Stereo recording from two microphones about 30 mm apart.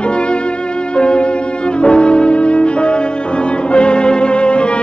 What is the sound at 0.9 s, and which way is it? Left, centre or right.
Violin, left.